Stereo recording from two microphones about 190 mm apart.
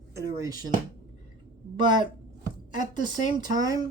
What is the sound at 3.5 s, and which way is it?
Speech, 20° right (ahead or behind).